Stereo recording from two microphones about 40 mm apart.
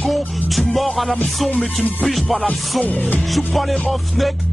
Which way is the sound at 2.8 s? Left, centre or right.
Left.